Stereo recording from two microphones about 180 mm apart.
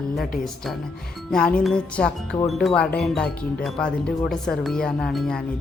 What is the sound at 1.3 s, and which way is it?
Speech, 5° left (ahead or behind).